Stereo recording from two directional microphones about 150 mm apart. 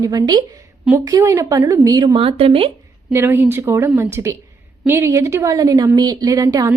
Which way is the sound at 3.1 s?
15° right (ahead or behind).